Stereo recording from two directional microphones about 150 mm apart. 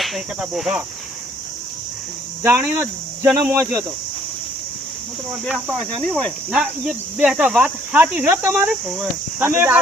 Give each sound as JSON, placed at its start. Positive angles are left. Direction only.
{"t": 0.0, "sound": "cricket", "side_deg": 0}
{"t": 2.4, "sound": "speech", "side_deg": -15}
{"t": 5.3, "sound": "speech", "side_deg": -10}
{"t": 5.7, "sound": "cricket", "side_deg": 0}
{"t": 6.5, "sound": "speech", "side_deg": -5}